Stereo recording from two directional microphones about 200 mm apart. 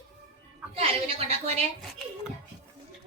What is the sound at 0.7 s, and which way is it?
Speech, 30° right (ahead or behind).